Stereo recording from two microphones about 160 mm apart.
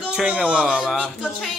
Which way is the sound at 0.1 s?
5° right (ahead or behind).